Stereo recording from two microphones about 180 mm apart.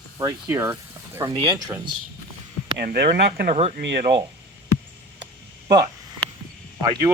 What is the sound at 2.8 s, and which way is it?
Speech, 60° right (ahead or behind).